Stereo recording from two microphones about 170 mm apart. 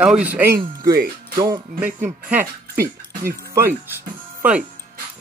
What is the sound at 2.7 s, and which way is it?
Speech, 60° right (ahead or behind).